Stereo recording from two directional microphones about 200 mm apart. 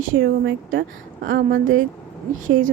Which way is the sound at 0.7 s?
45° right (ahead or behind).